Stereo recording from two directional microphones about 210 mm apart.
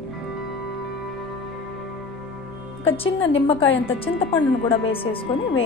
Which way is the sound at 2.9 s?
25° left (ahead or behind).